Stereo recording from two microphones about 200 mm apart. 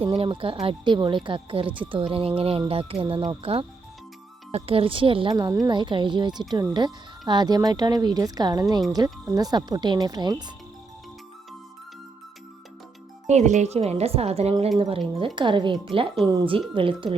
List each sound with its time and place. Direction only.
0.0 s speech: 25° right (ahead or behind)
13.2 s speech: 35° right (ahead or behind)